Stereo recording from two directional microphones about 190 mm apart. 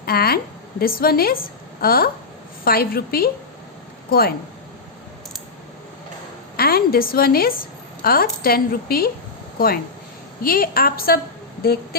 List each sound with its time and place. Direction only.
0.0 s a woman's voice: 55° left (ahead or behind)
6.6 s a woman's voice: 55° left (ahead or behind)
10.4 s a woman's voice: 50° left (ahead or behind)